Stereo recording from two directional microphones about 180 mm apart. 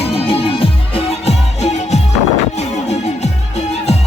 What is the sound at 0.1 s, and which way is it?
Music, 30° left (ahead or behind).